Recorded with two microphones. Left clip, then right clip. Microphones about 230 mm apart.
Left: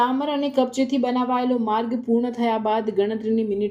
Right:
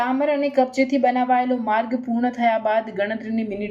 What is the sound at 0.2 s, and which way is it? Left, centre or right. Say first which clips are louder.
A woman's voice: right 3 dB; left.